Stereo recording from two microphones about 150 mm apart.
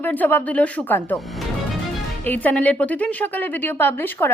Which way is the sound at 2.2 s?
10° left (ahead or behind).